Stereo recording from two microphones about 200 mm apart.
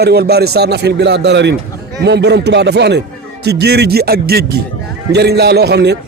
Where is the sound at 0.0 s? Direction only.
55° right (ahead or behind).